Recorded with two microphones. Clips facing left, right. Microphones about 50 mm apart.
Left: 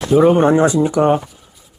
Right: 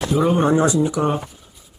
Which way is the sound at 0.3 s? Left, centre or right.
Left.